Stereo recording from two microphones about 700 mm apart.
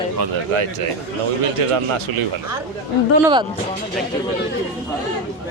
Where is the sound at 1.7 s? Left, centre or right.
Right.